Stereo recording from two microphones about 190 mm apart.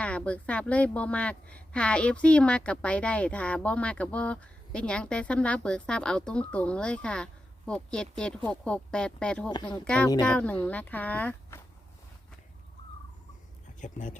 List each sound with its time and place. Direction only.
0.0 s a woman's voice: 5° left (ahead or behind)
13.8 s speech: 40° left (ahead or behind)